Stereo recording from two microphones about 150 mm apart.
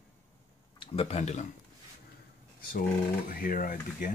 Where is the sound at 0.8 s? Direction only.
40° left (ahead or behind).